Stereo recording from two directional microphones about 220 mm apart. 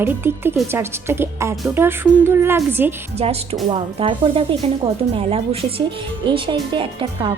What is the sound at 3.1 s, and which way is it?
Speech, 30° right (ahead or behind).